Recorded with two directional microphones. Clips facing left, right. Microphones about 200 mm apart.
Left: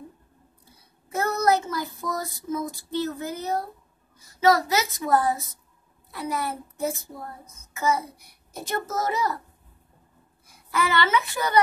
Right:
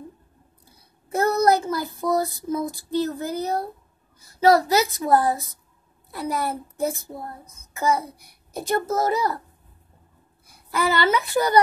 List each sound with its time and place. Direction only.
1.1 s child singing: 35° right (ahead or behind)
4.4 s a child's voice: 35° right (ahead or behind)
10.7 s a child's voice: 35° right (ahead or behind)